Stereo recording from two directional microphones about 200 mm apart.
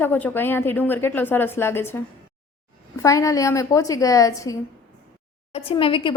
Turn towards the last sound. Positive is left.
turn(degrees=25)  # may be behind; listen again after turning